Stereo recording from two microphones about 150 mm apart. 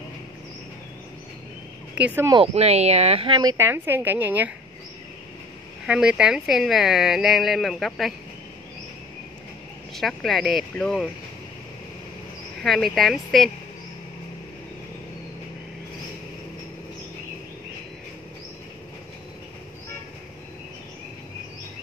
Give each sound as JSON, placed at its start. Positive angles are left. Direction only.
{"t": 2.0, "sound": "speech", "side_deg": -10}
{"t": 2.4, "sound": "speech", "side_deg": -45}
{"t": 3.3, "sound": "speech", "side_deg": -20}
{"t": 5.9, "sound": "speech", "side_deg": -5}
{"t": 9.9, "sound": "speech", "side_deg": 0}
{"t": 12.6, "sound": "speech", "side_deg": 0}